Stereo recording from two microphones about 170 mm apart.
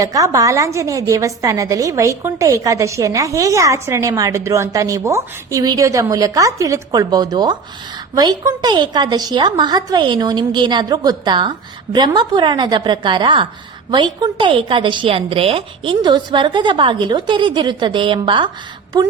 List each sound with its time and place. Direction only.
0.0 s a woman's voice: 20° right (ahead or behind)